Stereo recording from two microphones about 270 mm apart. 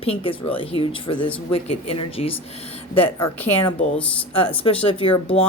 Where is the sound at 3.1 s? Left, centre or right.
Centre.